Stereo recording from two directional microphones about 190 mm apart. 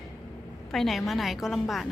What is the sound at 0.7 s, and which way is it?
A woman's voice, centre (ahead or behind).